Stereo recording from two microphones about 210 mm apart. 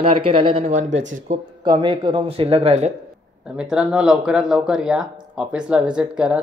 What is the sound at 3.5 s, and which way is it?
Speech, 5° right (ahead or behind).